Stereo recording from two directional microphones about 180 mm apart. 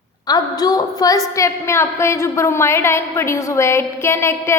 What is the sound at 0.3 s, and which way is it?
A woman's voice, 20° left (ahead or behind).